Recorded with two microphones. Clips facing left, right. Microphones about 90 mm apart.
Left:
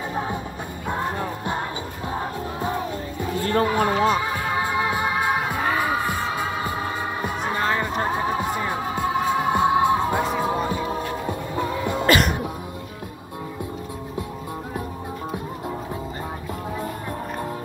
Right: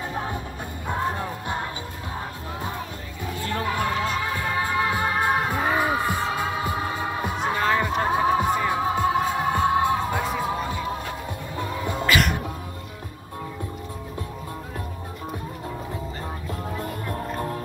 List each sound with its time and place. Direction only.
3.6 s a sound: 25° left (ahead or behind)
4.1 s music: 15° left (ahead or behind)
8.1 s music: 10° right (ahead or behind)
9.5 s music: 15° left (ahead or behind)
12.1 s music: 25° left (ahead or behind)